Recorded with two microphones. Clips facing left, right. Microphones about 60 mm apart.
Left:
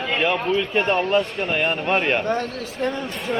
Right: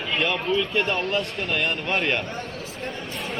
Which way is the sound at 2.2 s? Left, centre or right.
Left.